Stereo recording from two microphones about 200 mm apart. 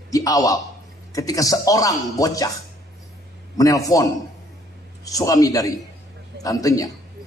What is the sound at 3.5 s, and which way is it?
Speech, 15° left (ahead or behind).